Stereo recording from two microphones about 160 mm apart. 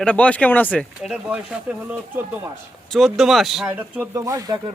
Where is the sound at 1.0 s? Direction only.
5° right (ahead or behind).